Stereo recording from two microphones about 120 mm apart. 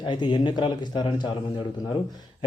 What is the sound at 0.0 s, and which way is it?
Speech, 40° left (ahead or behind).